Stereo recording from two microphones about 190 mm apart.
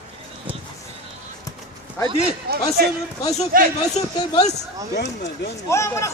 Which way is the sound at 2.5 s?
55° right (ahead or behind).